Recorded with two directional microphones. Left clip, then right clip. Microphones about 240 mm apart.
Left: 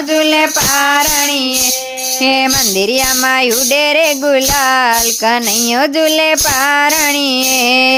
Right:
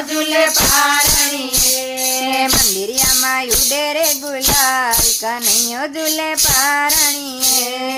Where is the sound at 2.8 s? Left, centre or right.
Left.